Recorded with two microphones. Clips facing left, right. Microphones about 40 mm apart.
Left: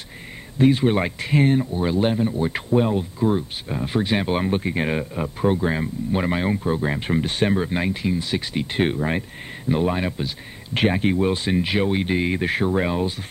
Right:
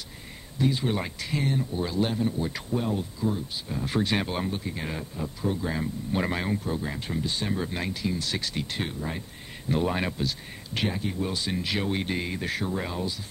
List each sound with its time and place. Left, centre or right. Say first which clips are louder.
0.6 s speech: left 9 dB; left
3.8 s speech: left 4 dB; centre
4.5 s speech: left 10 dB; left
6.1 s speech: left 5 dB; left
7.5 s speech: left 8 dB; left
8.8 s speech: left 11 dB; left
9.7 s speech: left 5 dB; centre
10.8 s speech: left 10 dB; left
12.3 s speech: left 8 dB; left